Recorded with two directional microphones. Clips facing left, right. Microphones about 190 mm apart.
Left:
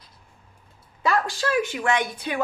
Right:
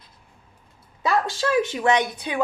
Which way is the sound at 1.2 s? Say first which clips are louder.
Right 2 dB; 20° right (ahead or behind).